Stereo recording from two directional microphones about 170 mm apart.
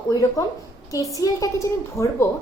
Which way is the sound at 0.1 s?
20° left (ahead or behind).